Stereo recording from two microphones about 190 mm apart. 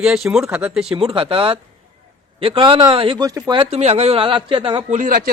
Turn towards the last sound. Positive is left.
turn(degrees=-50)  # may be behind; listen again after turning